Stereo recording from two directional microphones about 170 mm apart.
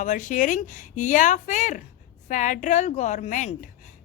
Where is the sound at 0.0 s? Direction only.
45° left (ahead or behind).